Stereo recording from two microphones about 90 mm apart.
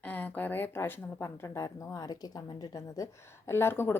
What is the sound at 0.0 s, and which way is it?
A woman's voice, 20° left (ahead or behind).